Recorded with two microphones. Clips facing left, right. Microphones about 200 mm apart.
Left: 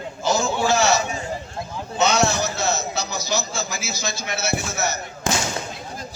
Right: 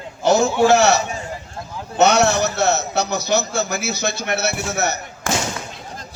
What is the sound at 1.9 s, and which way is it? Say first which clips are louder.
A man's voice: right 5 dB; 65° right (ahead or behind).